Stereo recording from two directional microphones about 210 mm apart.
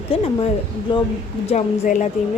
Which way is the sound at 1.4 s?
35° left (ahead or behind).